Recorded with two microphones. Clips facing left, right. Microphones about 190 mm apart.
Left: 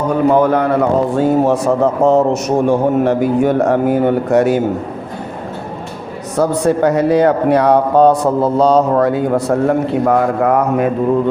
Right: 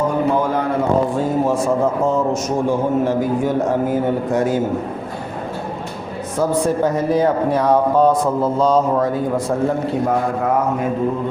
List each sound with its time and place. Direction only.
0.5 s a man's voice: 65° left (ahead or behind)
6.3 s a man's voice: 70° left (ahead or behind)